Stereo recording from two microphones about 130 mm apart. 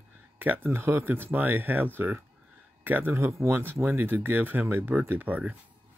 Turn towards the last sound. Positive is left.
turn(degrees=-10)  # may be behind; listen again after turning